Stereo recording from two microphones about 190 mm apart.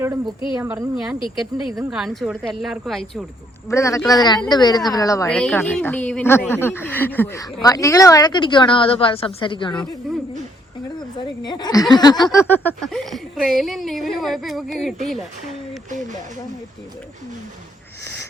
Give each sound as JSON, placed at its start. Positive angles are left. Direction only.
{"t": 0.6, "sound": "a woman's voice", "side_deg": -10}
{"t": 3.7, "sound": "a woman's voice", "side_deg": 15}
{"t": 5.3, "sound": "a woman's voice", "side_deg": 5}
{"t": 12.5, "sound": "a woman's voice", "side_deg": 10}